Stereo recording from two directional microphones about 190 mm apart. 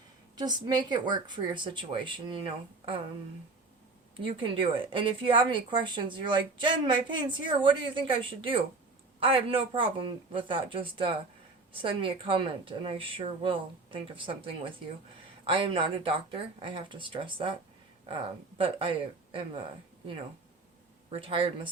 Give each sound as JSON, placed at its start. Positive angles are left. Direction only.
{"t": 0.3, "sound": "speech", "side_deg": -20}
{"t": 4.2, "sound": "speech", "side_deg": -25}
{"t": 21.1, "sound": "speech", "side_deg": -30}